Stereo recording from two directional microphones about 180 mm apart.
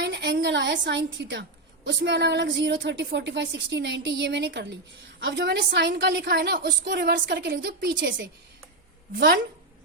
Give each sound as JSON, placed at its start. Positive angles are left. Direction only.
{"t": 0.0, "sound": "a woman's voice", "side_deg": -75}